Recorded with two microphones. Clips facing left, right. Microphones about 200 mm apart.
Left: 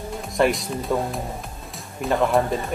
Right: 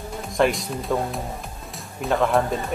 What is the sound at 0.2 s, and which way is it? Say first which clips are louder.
Speech: even; centre (ahead or behind).